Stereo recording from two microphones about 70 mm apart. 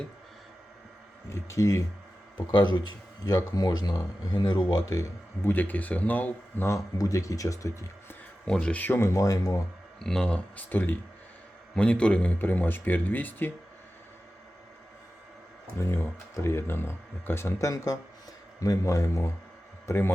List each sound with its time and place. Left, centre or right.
1.3 s speech: left
3.2 s speech: left
4.9 s speech: left
5.5 s speech: left
6.7 s speech: left
8.4 s speech: centre
9.0 s speech: left
10.0 s speech: centre; by 11.0 s left
11.7 s a man's voice: centre
15.8 s speech: left